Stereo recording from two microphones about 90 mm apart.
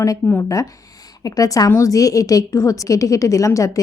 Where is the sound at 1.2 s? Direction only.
40° left (ahead or behind).